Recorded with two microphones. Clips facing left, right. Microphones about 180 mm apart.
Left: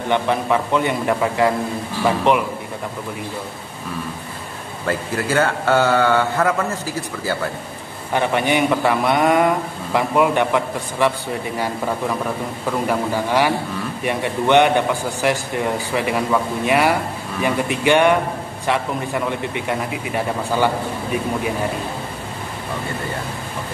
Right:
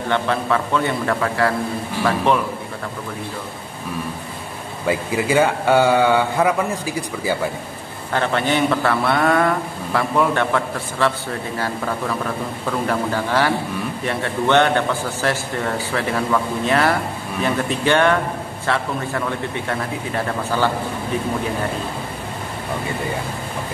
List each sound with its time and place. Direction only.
0.1 s a man's voice: 15° left (ahead or behind)
4.8 s a man's voice: 10° right (ahead or behind)
8.1 s a man's voice: 15° left (ahead or behind)